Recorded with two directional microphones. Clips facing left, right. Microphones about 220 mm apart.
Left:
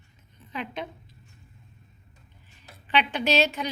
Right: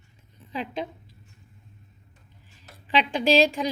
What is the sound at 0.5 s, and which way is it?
Speech, 30° right (ahead or behind).